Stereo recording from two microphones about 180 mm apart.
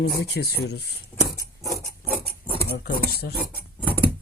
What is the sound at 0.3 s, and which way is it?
Speech, 65° left (ahead or behind).